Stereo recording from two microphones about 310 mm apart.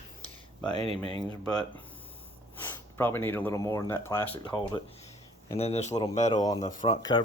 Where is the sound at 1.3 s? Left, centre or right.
Centre.